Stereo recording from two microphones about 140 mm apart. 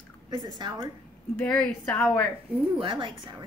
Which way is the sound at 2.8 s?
35° right (ahead or behind).